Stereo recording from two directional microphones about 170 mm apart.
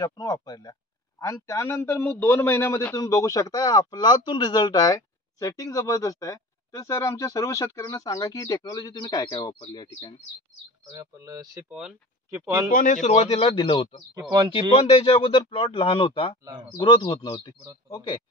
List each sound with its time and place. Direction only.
0.0 s a man's voice: 20° left (ahead or behind)
10.9 s speech: 20° right (ahead or behind)
12.7 s speech: 50° left (ahead or behind); by 16.3 s 30° left (ahead or behind)
16.4 s speech: 25° right (ahead or behind)
16.7 s a man's voice: 25° left (ahead or behind)